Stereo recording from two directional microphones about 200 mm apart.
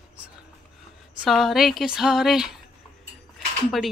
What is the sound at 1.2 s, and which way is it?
Speech, centre (ahead or behind).